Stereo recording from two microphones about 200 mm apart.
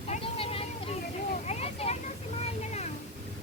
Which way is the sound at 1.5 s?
30° left (ahead or behind).